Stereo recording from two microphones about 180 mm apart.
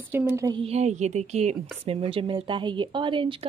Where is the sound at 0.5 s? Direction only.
35° right (ahead or behind).